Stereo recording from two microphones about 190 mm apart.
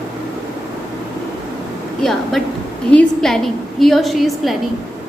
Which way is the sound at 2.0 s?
Centre (ahead or behind).